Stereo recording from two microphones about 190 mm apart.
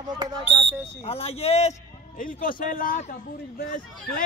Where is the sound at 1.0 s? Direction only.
30° left (ahead or behind).